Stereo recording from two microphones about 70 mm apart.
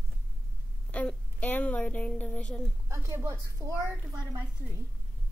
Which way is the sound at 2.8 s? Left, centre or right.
Right.